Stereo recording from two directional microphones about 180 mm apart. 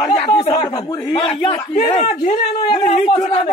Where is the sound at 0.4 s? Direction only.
25° left (ahead or behind).